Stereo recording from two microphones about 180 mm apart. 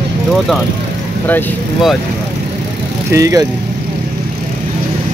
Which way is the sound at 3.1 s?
20° right (ahead or behind).